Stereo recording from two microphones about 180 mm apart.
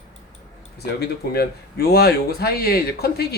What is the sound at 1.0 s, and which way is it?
Speech, 60° left (ahead or behind).